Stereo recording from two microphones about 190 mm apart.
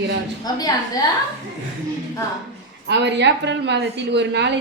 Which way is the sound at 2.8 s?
65° right (ahead or behind).